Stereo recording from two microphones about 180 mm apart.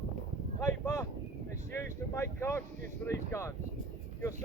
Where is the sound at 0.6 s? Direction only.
15° left (ahead or behind).